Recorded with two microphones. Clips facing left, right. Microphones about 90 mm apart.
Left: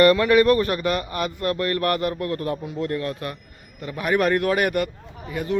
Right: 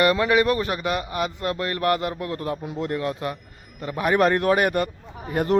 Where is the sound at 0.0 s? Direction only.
15° right (ahead or behind).